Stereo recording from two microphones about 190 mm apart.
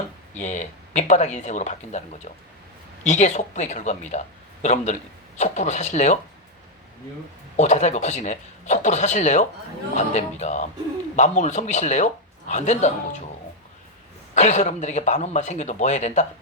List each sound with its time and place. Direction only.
0.3 s speech: 40° left (ahead or behind)
7.5 s speech: 35° left (ahead or behind)
14.3 s speech: 40° left (ahead or behind)